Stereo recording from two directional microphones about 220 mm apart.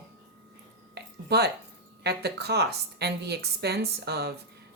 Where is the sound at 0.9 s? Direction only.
50° right (ahead or behind).